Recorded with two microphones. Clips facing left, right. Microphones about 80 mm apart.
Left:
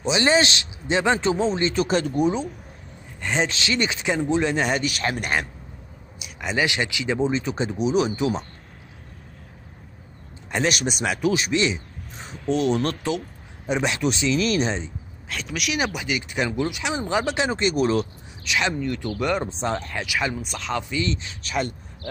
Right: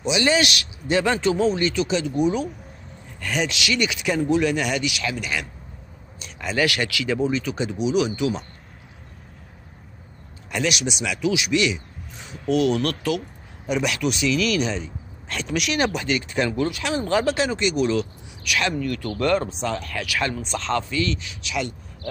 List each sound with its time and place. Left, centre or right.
0.0 s speech: left
1.8 s speech: left
3.2 s speech: left
6.1 s a sound: centre
6.4 s speech: left
10.5 s speech: left
15.2 s speech: centre; by 17.6 s left
17.6 s speech: left
18.4 s speech: left
19.5 s speech: left; by 20.8 s centre
20.9 s speech: left